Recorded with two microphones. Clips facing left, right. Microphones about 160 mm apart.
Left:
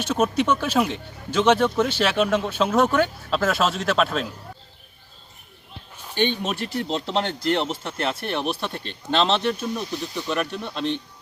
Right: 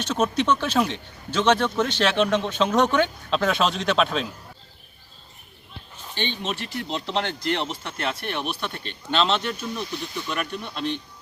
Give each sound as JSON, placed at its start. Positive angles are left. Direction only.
{"t": 0.0, "sound": "speech", "side_deg": 10}
{"t": 6.1, "sound": "speech", "side_deg": 50}
{"t": 6.7, "sound": "speech", "side_deg": 35}